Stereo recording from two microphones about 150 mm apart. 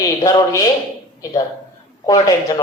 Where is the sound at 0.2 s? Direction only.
25° left (ahead or behind).